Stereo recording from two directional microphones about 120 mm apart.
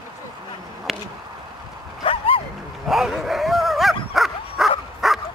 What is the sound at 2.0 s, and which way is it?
Dog, 50° left (ahead or behind).